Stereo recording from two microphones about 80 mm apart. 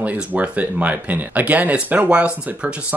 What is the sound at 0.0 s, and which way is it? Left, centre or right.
Speech, centre.